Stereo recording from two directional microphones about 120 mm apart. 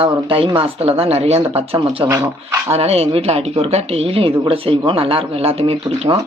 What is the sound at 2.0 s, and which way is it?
Speech, 20° right (ahead or behind).